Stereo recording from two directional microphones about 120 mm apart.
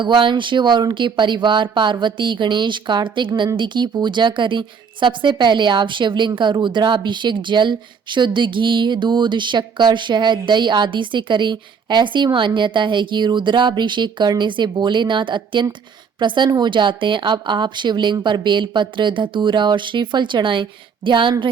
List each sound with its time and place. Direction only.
0.0 s speech: 40° right (ahead or behind)